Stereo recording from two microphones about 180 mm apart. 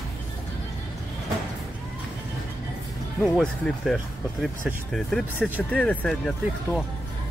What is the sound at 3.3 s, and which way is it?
Speech, centre (ahead or behind).